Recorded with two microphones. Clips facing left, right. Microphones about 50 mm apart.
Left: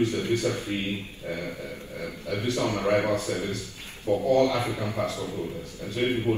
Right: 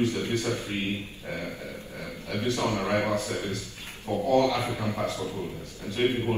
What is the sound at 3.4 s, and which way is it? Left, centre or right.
Speech, right.